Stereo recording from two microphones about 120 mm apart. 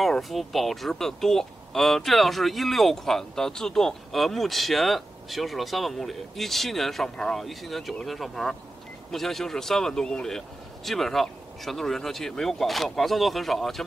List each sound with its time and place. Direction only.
0.0 s speech: centre (ahead or behind)